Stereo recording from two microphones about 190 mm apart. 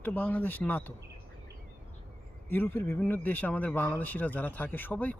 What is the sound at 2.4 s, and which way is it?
Speech, 10° left (ahead or behind).